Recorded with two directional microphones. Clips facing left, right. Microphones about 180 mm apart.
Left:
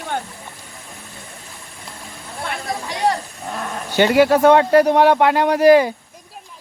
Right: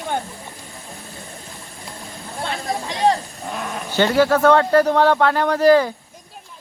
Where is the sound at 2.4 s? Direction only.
25° right (ahead or behind).